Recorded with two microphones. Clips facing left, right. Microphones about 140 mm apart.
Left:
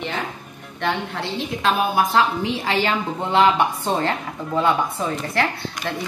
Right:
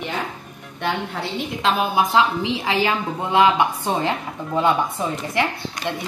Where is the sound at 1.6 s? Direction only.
20° right (ahead or behind).